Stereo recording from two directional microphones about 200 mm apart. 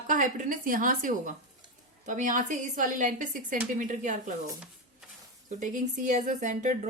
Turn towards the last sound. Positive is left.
turn(degrees=-40)  # may be behind; listen again after turning